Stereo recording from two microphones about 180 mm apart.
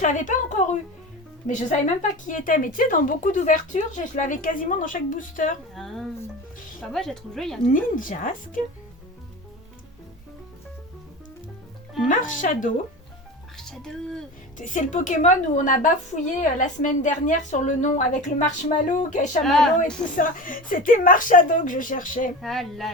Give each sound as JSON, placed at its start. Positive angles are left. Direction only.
{"t": 0.0, "sound": "a woman's voice", "side_deg": 45}
{"t": 5.7, "sound": "speech", "side_deg": 0}
{"t": 7.7, "sound": "a woman's voice", "side_deg": 50}
{"t": 12.0, "sound": "a woman's voice", "side_deg": 45}
{"t": 13.6, "sound": "speech", "side_deg": 5}
{"t": 14.6, "sound": "a woman's voice", "side_deg": 45}
{"t": 19.4, "sound": "speech", "side_deg": 0}
{"t": 20.1, "sound": "a woman's voice", "side_deg": 50}
{"t": 22.4, "sound": "speech", "side_deg": 0}